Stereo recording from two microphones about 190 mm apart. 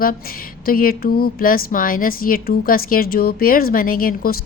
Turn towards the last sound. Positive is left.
turn(degrees=50)  # may be behind; listen again after turning